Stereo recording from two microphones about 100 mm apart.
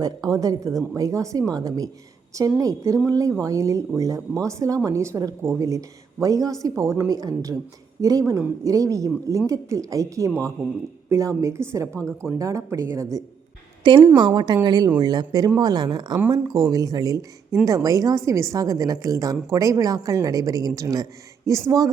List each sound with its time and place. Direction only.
0.0 s speech: 35° right (ahead or behind)
11.9 s a woman's voice: 10° left (ahead or behind)
12.2 s speech: 35° right (ahead or behind)
13.8 s speech: 55° right (ahead or behind); by 21.8 s 35° right (ahead or behind)